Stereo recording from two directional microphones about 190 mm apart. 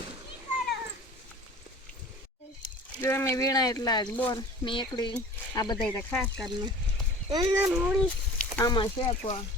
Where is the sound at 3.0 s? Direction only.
10° left (ahead or behind).